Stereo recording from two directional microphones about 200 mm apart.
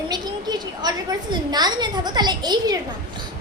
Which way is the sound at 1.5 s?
20° right (ahead or behind).